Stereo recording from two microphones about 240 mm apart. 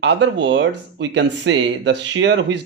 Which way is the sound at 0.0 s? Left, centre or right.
Right.